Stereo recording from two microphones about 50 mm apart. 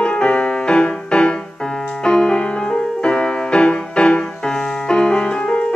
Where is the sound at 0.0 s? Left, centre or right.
Left.